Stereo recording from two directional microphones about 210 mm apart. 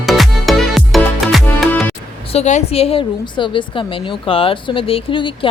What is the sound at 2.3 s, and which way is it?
A woman's voice, 30° left (ahead or behind).